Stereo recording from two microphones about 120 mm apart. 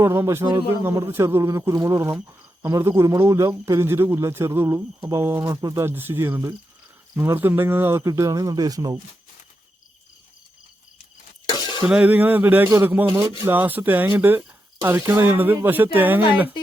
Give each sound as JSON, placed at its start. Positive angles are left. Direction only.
{"t": 0.0, "sound": "a man's voice", "side_deg": -20}
{"t": 5.9, "sound": "a man's voice", "side_deg": -15}
{"t": 11.4, "sound": "a sound", "side_deg": 35}
{"t": 11.8, "sound": "speech", "side_deg": -10}